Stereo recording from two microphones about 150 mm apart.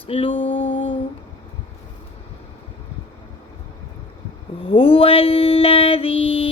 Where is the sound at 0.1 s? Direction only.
35° left (ahead or behind).